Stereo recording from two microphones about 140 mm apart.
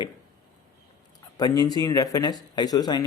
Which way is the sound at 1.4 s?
30° left (ahead or behind).